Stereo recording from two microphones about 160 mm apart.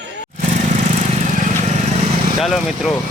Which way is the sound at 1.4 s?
45° right (ahead or behind).